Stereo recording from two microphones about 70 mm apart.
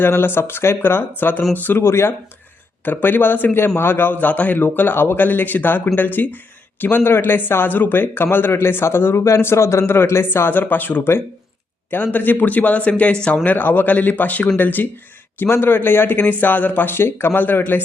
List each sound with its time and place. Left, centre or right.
0.0 s a man's voice: left